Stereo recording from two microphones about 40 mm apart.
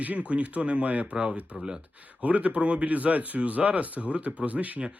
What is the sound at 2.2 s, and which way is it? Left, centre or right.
Speech, right.